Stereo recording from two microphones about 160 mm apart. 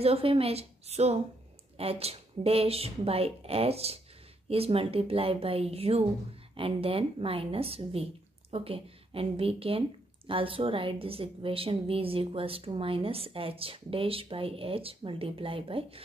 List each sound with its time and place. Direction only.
0.0 s a woman's voice: 35° right (ahead or behind)